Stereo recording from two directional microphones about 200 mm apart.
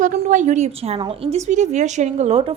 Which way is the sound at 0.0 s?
40° right (ahead or behind).